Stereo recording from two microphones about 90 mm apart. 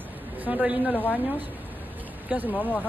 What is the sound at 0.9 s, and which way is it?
Speech, 20° left (ahead or behind).